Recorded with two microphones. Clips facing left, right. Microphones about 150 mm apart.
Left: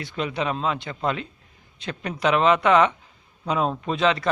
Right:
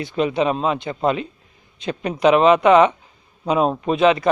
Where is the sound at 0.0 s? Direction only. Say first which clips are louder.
Right 7 dB; 20° right (ahead or behind).